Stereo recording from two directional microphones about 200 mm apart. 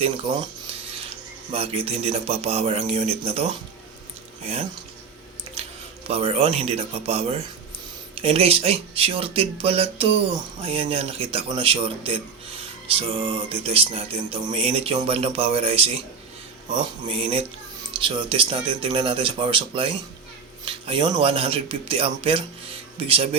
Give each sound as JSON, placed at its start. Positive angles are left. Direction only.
{"t": 1.5, "sound": "speech", "side_deg": -30}
{"t": 5.6, "sound": "squish", "side_deg": -30}
{"t": 6.1, "sound": "speech", "side_deg": -30}